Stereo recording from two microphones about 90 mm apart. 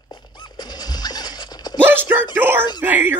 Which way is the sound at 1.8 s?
20° right (ahead or behind).